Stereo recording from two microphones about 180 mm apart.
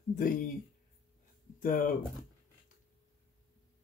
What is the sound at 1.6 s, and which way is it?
Speech, 50° left (ahead or behind).